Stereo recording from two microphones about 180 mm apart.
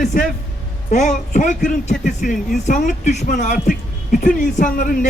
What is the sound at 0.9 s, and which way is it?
Speech, 40° left (ahead or behind).